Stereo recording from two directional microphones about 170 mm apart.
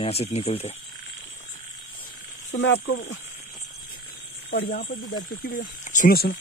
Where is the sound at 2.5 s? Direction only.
90° left.